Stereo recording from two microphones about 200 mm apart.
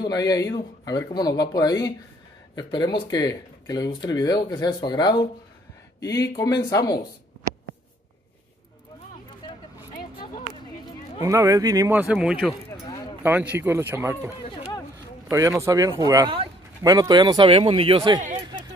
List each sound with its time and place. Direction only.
0.0 s speech: 20° left (ahead or behind)
11.2 s speech: 15° right (ahead or behind)
12.7 s a sound: 20° left (ahead or behind)
13.2 s speech: 10° right (ahead or behind)
15.6 s speech: 15° right (ahead or behind)
18.2 s a sound: 40° right (ahead or behind)